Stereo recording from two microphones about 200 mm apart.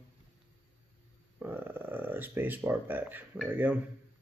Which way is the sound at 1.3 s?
10° right (ahead or behind).